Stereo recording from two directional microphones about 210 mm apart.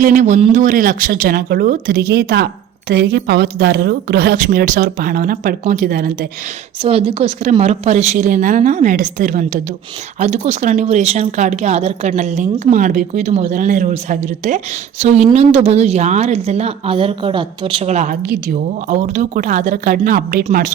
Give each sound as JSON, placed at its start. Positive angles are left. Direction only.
{"t": 0.0, "sound": "a woman's voice", "side_deg": -35}
{"t": 6.8, "sound": "a woman's voice", "side_deg": -25}